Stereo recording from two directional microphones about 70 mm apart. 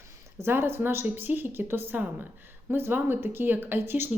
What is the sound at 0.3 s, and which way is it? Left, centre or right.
Speech, right.